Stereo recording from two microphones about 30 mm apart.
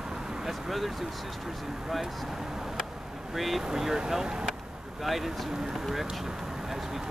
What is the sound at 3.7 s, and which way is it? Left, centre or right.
Speech, centre.